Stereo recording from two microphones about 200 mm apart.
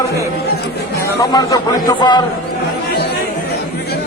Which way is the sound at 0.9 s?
20° left (ahead or behind).